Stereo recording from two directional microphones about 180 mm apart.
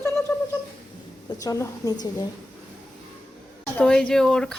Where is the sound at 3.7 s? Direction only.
5° left (ahead or behind).